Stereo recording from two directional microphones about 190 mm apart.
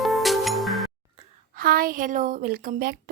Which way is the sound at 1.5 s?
50° right (ahead or behind).